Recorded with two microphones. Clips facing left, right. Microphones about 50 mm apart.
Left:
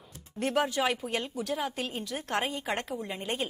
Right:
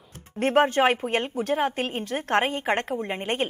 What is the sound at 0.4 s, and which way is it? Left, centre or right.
A woman's voice, right.